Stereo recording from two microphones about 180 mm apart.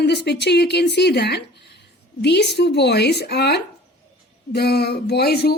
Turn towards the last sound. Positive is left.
turn(degrees=60)  # may be behind; listen again after turning